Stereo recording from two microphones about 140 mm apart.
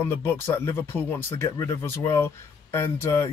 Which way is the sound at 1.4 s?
20° left (ahead or behind).